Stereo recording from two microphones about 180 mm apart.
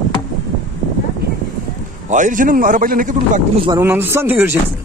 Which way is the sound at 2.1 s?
45° right (ahead or behind).